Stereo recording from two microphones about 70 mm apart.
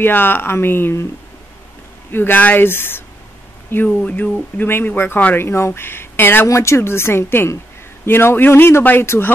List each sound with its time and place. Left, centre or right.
0.0 s a man's voice: left
2.1 s a man's voice: left
6.4 s a man's voice: left